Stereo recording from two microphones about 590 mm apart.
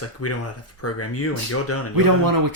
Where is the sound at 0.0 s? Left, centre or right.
Left.